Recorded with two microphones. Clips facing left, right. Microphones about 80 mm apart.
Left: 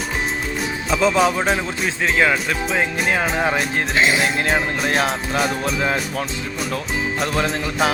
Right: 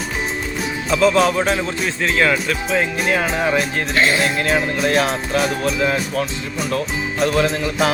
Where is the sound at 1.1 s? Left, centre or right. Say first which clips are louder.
Right 1 dB; centre.